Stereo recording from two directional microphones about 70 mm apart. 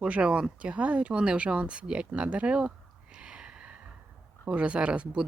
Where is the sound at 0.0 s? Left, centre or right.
Centre.